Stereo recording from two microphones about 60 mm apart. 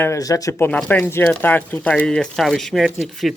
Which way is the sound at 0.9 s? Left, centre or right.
Left.